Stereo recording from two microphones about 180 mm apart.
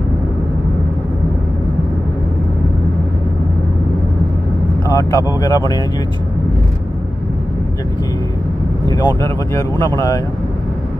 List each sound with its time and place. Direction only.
4.9 s speech: 20° left (ahead or behind)
8.8 s speech: 20° left (ahead or behind)